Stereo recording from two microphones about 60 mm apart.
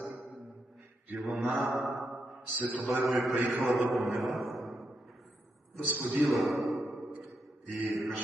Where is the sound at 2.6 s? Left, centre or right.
Right.